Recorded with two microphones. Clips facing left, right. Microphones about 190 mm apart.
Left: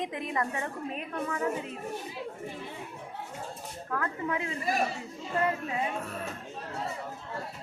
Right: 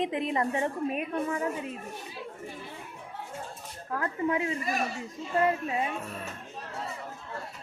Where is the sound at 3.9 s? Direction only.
25° right (ahead or behind).